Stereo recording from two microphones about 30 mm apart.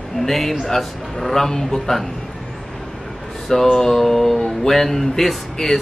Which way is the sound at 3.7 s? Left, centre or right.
Centre.